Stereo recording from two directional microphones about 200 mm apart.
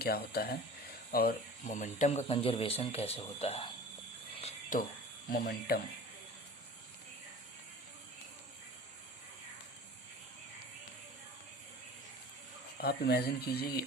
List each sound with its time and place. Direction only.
0.0 s speech: 50° left (ahead or behind); by 3.7 s 30° left (ahead or behind)
4.4 s cricket: 30° left (ahead or behind)
5.3 s speech: 50° left (ahead or behind)
12.8 s speech: 50° left (ahead or behind)